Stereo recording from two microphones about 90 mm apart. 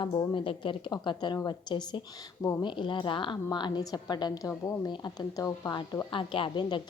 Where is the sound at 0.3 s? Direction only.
70° left (ahead or behind); by 4.9 s 40° left (ahead or behind).